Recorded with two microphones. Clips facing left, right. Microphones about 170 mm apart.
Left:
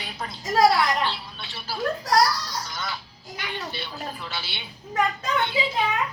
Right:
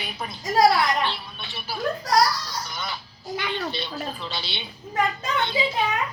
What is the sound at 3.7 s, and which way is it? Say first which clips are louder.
Speech: right 3 dB; 20° right (ahead or behind).